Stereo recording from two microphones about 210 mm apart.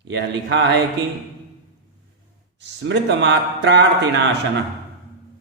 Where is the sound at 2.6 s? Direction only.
55° right (ahead or behind).